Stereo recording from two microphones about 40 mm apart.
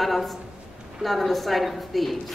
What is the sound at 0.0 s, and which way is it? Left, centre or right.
A woman's voice, centre.